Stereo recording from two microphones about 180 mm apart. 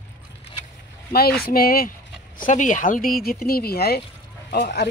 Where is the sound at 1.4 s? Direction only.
55° left (ahead or behind).